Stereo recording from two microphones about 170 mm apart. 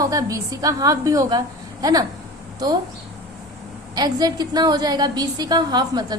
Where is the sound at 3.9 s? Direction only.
25° right (ahead or behind).